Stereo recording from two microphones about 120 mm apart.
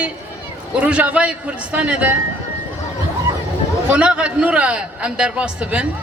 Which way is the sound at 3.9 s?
10° right (ahead or behind).